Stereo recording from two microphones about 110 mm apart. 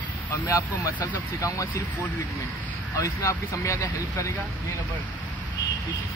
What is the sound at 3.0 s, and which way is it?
Speech, 30° left (ahead or behind).